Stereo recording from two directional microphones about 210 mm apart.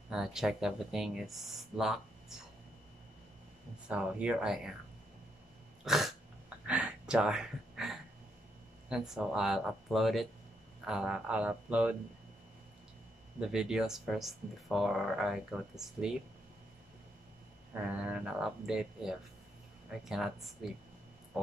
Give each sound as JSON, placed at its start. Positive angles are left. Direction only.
{"t": 0.1, "sound": "speech", "side_deg": 0}
{"t": 3.9, "sound": "speech", "side_deg": -5}
{"t": 5.9, "sound": "throat clearing", "side_deg": 0}
{"t": 6.6, "sound": "a sound", "side_deg": -5}
{"t": 8.8, "sound": "speech", "side_deg": -5}
{"t": 13.4, "sound": "speech", "side_deg": -5}
{"t": 17.8, "sound": "speech", "side_deg": -5}